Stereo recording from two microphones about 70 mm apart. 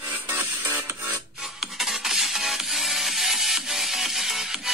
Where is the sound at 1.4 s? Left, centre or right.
Centre.